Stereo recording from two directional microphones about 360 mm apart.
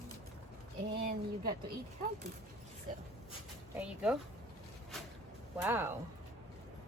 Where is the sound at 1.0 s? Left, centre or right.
Right.